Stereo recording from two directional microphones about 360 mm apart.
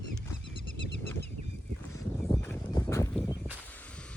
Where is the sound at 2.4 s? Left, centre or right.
Centre.